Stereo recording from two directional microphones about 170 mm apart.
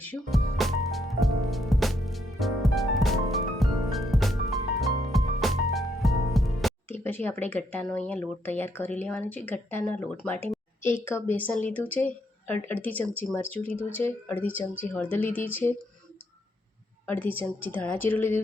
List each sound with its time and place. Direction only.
0.0 s music: 5° left (ahead or behind)
6.8 s a woman's voice: 15° left (ahead or behind)
17.1 s a woman's voice: 10° left (ahead or behind)